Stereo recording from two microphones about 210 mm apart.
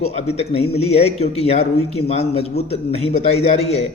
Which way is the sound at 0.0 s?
30° left (ahead or behind).